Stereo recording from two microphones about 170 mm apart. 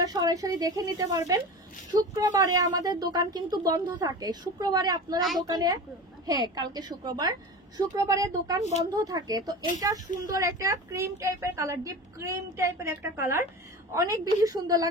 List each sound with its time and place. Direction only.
0.0 s a woman's voice: 20° right (ahead or behind)